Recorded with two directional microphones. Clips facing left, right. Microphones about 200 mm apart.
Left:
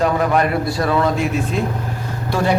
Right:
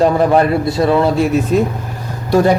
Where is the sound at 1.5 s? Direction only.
40° right (ahead or behind).